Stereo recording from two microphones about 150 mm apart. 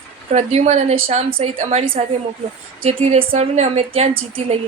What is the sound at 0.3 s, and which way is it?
A woman's voice, 50° right (ahead or behind).